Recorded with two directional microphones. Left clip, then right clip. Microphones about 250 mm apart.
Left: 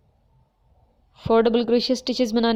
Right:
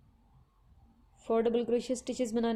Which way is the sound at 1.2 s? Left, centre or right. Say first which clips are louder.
Left 10 dB; left.